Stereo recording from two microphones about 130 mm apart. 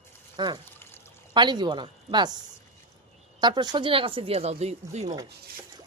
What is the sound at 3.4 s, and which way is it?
Speech, 35° right (ahead or behind).